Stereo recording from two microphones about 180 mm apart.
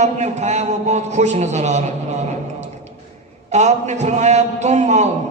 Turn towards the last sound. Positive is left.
turn(degrees=-40)  # may be behind; listen again after turning